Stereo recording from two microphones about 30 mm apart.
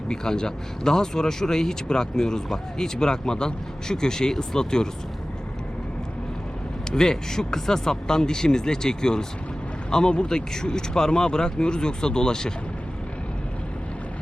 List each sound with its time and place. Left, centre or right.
0.1 s speech: left
6.9 s speech: left